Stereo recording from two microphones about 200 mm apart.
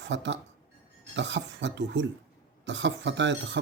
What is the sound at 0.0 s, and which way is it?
Speech, 65° right (ahead or behind).